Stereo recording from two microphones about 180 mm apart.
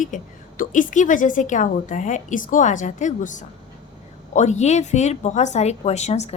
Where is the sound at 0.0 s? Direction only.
45° left (ahead or behind).